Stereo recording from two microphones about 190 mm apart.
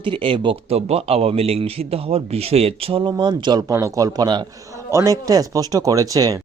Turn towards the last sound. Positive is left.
turn(degrees=-20)  # may be behind; listen again after turning